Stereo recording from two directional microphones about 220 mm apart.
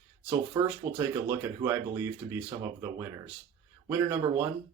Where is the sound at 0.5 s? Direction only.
20° right (ahead or behind).